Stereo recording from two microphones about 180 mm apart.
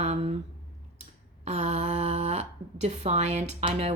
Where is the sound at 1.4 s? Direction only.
40° right (ahead or behind).